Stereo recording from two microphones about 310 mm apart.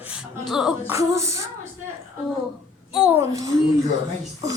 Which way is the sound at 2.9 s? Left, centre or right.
Centre.